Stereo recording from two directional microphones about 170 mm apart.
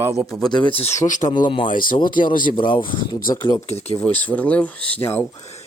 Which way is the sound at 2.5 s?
30° left (ahead or behind).